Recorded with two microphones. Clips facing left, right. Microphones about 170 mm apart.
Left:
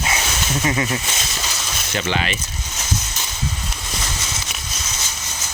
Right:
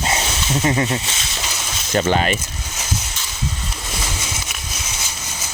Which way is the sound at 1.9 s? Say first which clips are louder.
Right 6 dB; 45° right (ahead or behind).